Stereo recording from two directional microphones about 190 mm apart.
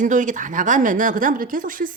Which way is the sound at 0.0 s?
40° right (ahead or behind).